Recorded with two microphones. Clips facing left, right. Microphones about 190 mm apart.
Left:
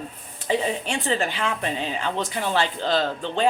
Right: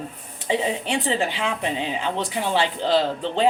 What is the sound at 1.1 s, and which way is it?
A woman's voice, 15° right (ahead or behind).